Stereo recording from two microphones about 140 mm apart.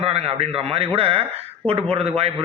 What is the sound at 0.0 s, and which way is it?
A man's voice, 45° right (ahead or behind).